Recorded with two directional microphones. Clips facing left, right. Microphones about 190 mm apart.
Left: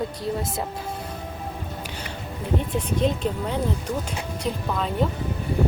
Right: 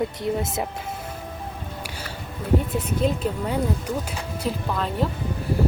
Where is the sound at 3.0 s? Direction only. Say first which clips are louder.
Even; 5° right (ahead or behind).